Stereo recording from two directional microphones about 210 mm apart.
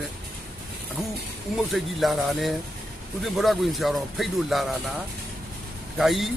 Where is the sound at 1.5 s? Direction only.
Centre (ahead or behind).